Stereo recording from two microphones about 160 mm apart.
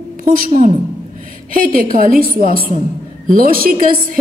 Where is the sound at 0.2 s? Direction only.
65° right (ahead or behind).